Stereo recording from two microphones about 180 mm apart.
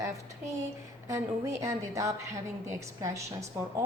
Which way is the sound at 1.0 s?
15° right (ahead or behind).